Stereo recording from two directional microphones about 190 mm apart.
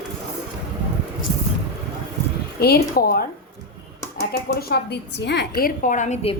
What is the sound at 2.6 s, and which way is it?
Speech, 55° left (ahead or behind).